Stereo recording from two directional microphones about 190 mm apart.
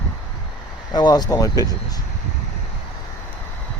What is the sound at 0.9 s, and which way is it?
Speech, 20° left (ahead or behind).